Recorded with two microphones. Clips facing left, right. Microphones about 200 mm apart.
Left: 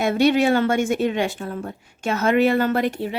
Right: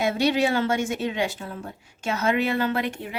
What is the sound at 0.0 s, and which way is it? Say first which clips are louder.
A woman's voice: left 4 dB; 55° left (ahead or behind).